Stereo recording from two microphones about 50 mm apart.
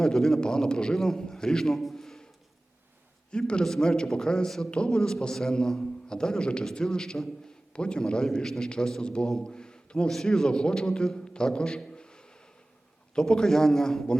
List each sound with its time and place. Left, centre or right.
0.0 s a man's voice: centre
3.3 s a man's voice: centre
9.4 s a sound: centre
10.1 s a man's voice: centre